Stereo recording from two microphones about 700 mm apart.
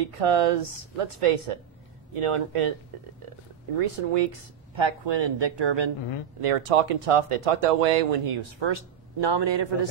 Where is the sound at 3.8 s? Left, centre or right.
Right.